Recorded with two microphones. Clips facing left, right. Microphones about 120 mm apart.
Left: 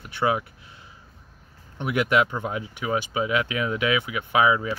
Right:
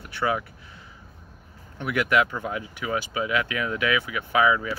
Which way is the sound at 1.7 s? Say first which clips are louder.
Left 1 dB; 25° left (ahead or behind).